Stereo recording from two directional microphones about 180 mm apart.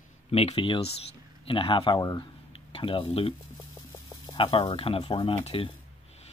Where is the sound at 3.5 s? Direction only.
15° left (ahead or behind).